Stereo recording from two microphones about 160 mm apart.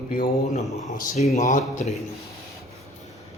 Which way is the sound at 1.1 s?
45° left (ahead or behind).